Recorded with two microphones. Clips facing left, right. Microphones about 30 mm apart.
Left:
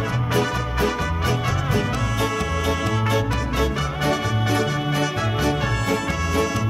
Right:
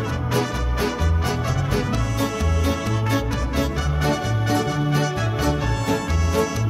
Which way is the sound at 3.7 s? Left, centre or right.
Centre.